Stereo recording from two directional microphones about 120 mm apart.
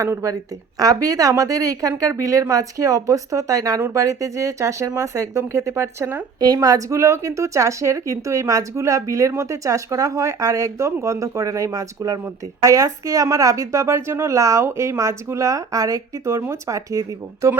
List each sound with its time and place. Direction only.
0.0 s speech: 25° right (ahead or behind)
6.4 s speech: 30° right (ahead or behind)